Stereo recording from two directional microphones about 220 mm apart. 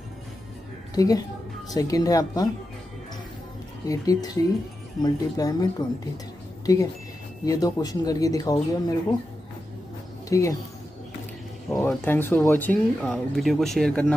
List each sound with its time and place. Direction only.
0.9 s speech: 15° left (ahead or behind)
3.8 s speech: 15° left (ahead or behind)
10.3 s speech: 15° left (ahead or behind)
11.7 s speech: 10° left (ahead or behind)